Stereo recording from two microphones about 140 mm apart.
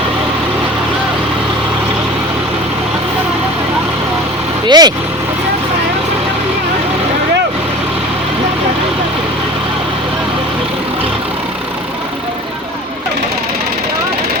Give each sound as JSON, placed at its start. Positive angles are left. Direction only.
{"t": 4.6, "sound": "speech", "side_deg": -30}